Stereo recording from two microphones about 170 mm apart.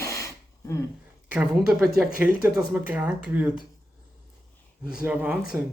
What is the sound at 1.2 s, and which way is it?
Speech, 5° right (ahead or behind).